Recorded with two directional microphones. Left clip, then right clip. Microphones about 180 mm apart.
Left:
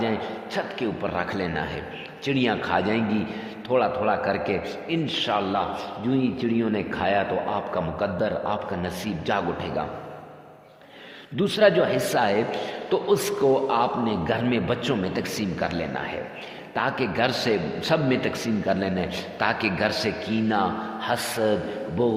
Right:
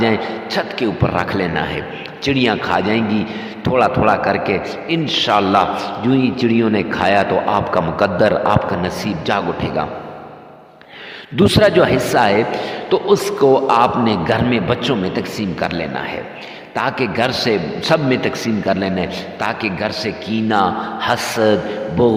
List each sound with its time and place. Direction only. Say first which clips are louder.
0.0 s a man's voice: right 10 dB; 40° right (ahead or behind)
11.3 s a man's voice: right 7 dB; 45° right (ahead or behind)